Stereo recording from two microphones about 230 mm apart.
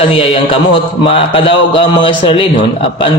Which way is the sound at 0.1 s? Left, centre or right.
Left.